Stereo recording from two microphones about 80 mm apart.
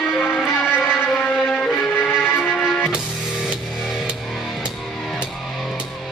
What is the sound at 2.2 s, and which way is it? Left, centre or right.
Music, left.